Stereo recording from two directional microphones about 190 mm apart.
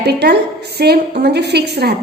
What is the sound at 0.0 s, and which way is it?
A woman's voice, 60° right (ahead or behind).